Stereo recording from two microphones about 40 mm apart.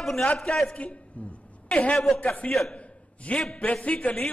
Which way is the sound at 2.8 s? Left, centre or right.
Left.